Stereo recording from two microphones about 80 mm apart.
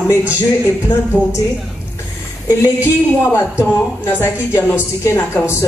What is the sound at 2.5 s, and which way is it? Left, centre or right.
Speech, left.